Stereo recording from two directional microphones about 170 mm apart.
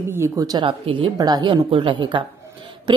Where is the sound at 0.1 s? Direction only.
15° right (ahead or behind).